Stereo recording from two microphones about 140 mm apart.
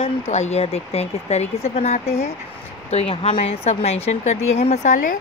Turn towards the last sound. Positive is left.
turn(degrees=65)  # may be behind; listen again after turning